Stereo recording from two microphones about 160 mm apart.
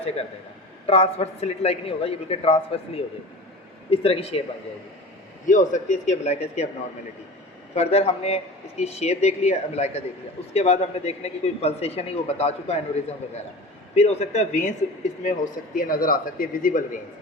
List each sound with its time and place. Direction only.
0.9 s speech: 40° left (ahead or behind)
5.5 s speech: 50° left (ahead or behind)
7.8 s speech: 40° left (ahead or behind)
15.7 s a man's voice: 60° left (ahead or behind)